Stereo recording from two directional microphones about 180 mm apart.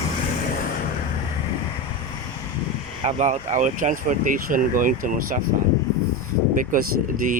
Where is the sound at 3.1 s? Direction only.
40° right (ahead or behind).